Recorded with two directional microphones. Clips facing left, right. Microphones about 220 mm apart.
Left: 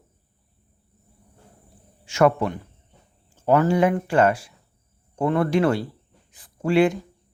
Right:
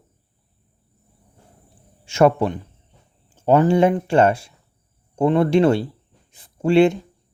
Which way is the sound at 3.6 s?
25° right (ahead or behind).